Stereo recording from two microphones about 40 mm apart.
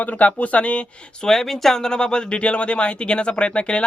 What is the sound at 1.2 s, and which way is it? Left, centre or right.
A man's voice, centre.